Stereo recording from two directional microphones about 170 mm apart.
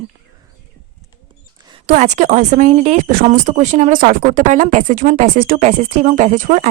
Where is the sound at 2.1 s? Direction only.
45° right (ahead or behind).